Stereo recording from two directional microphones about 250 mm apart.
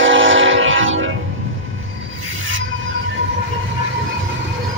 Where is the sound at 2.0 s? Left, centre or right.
Right.